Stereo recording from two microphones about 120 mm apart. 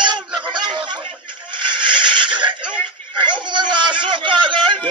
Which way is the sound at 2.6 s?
10° right (ahead or behind).